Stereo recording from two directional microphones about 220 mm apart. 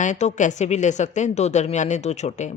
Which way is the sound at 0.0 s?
35° left (ahead or behind).